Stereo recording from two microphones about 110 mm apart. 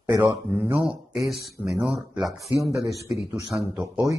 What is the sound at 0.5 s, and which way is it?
Speech, 15° right (ahead or behind).